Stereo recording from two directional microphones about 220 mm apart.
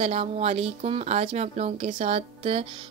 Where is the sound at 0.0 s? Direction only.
25° right (ahead or behind).